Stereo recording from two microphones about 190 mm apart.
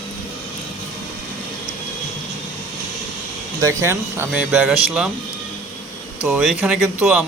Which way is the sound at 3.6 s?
15° right (ahead or behind).